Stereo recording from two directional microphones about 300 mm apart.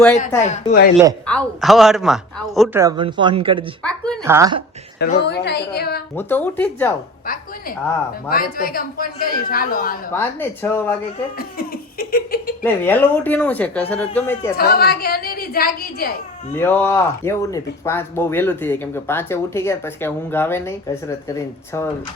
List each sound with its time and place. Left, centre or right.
0.4 s speech: left
1.3 s speech: centre
2.8 s speech: centre
3.8 s a sound: centre
4.2 s speech: centre
4.9 s a woman's voice: left
6.1 s speech: centre
8.3 s speech: left
10.1 s speech: centre
11.3 s speech: left
12.6 s speech: centre
14.6 s a woman's voice: left
16.6 s speech: centre